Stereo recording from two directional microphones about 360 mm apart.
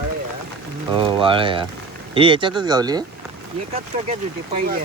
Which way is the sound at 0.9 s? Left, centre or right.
Centre.